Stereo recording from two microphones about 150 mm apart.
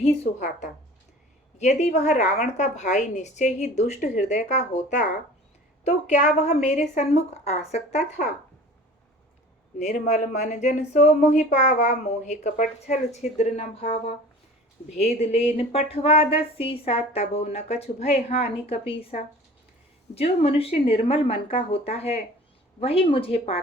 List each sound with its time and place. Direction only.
0.0 s a woman's voice: 50° left (ahead or behind)
9.7 s speech: 50° left (ahead or behind)